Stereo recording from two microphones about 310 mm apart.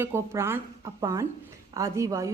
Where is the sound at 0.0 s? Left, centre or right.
Centre.